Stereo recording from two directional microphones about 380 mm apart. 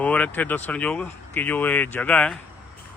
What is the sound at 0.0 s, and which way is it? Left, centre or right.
Speech, centre.